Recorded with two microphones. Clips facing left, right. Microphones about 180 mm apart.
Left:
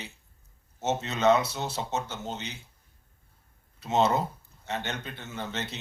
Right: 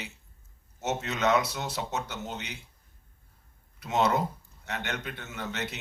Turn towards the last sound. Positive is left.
turn(degrees=30)  # may be behind; listen again after turning